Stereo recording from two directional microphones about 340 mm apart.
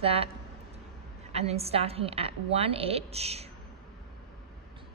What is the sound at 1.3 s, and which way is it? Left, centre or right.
A woman's voice, centre.